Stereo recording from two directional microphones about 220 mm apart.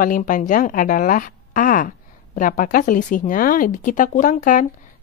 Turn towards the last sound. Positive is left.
turn(degrees=35)  # may be behind; listen again after turning